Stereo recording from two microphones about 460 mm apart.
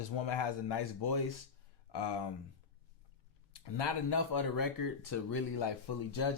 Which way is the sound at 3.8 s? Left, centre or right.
Left.